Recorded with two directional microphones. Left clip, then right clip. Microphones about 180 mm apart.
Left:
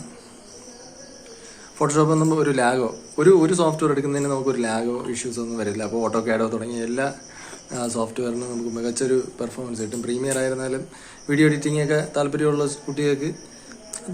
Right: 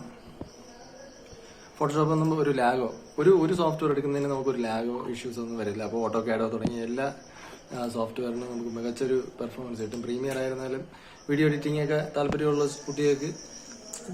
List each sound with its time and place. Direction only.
1.8 s a man's voice: 15° left (ahead or behind)